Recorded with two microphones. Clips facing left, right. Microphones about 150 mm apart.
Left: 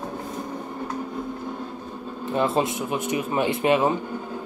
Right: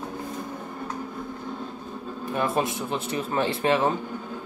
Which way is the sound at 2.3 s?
25° left (ahead or behind).